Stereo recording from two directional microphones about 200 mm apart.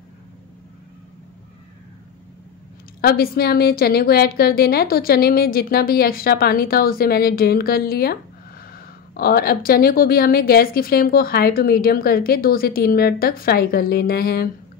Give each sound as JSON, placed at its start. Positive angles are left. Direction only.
{"t": 3.0, "sound": "a woman's voice", "side_deg": 50}